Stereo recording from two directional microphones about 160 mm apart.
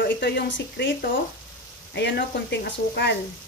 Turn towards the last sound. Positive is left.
turn(degrees=90)